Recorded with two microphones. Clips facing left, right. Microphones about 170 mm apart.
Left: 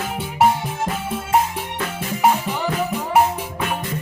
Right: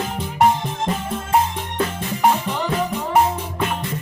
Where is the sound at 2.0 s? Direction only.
5° left (ahead or behind).